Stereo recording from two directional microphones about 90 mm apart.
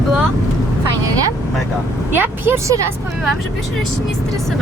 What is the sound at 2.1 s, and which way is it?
Speech, 25° right (ahead or behind).